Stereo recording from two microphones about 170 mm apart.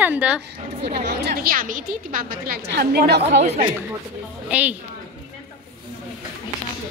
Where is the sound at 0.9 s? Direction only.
75° right (ahead or behind); by 2.2 s 55° right (ahead or behind).